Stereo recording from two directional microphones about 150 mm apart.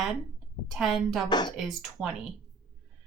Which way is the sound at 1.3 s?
30° left (ahead or behind).